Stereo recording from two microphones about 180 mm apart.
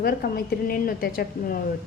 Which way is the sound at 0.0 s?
55° left (ahead or behind).